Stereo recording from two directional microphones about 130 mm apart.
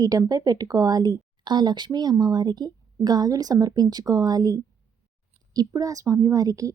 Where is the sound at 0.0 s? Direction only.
30° right (ahead or behind).